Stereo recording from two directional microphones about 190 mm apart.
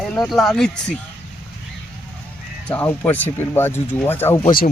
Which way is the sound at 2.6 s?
10° left (ahead or behind).